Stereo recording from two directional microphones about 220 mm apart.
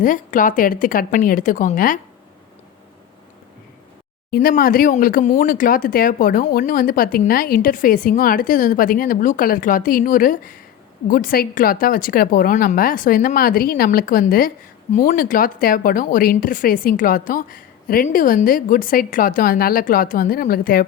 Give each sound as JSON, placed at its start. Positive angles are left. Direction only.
{"t": 0.0, "sound": "a woman's voice", "side_deg": 35}
{"t": 4.3, "sound": "a woman's voice", "side_deg": 40}